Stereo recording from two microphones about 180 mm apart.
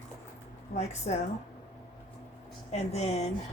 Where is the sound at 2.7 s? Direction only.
35° left (ahead or behind).